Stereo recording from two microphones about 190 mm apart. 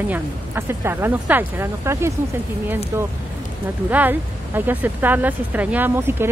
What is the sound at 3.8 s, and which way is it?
Speech, 10° right (ahead or behind).